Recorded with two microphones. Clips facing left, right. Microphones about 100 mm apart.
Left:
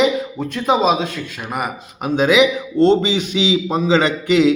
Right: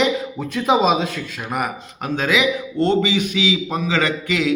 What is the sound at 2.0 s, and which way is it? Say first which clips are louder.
A man's voice: left 5 dB; 15° left (ahead or behind).